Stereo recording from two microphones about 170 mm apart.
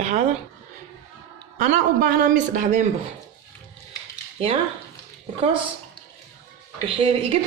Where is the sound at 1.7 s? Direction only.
60° right (ahead or behind).